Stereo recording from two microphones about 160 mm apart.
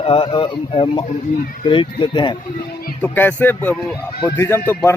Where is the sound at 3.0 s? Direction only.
10° left (ahead or behind).